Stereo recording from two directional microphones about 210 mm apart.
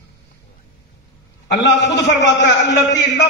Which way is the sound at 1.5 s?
55° left (ahead or behind).